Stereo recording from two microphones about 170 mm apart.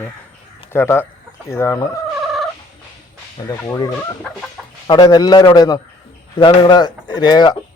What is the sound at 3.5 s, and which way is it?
A man's voice, 20° left (ahead or behind).